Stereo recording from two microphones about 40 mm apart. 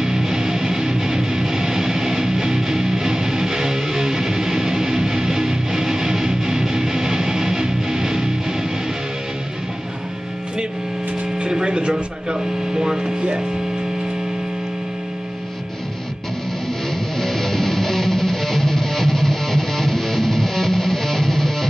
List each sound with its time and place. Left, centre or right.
0.0 s music: centre
11.3 s a sound: right
17.2 s music: centre